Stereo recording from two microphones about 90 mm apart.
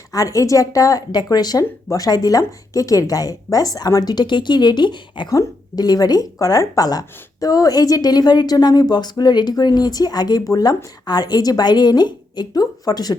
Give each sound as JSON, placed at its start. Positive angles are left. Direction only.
{"t": 0.1, "sound": "speech", "side_deg": 40}
{"t": 5.3, "sound": "speech", "side_deg": 40}